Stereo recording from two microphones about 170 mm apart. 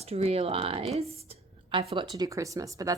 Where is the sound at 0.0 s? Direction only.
35° right (ahead or behind).